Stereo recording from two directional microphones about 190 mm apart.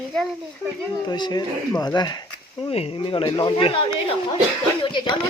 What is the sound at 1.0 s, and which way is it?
Speech, 20° left (ahead or behind).